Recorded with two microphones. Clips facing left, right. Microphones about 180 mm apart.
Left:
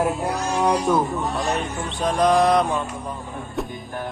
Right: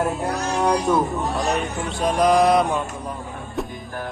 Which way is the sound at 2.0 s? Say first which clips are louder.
Right 1 dB; 5° right (ahead or behind).